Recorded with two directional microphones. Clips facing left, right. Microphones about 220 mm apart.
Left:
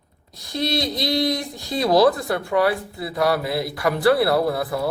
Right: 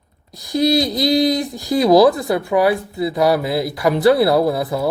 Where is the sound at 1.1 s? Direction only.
20° right (ahead or behind).